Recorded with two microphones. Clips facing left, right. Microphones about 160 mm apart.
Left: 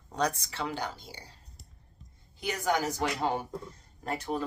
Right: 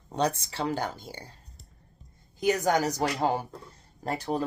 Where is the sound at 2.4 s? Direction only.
45° right (ahead or behind).